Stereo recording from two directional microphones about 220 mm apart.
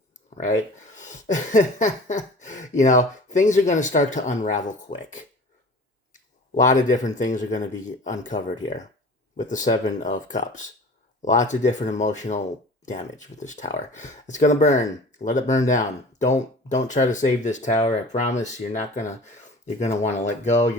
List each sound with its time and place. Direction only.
0.9 s speech: 35° left (ahead or behind)
6.5 s speech: 35° left (ahead or behind)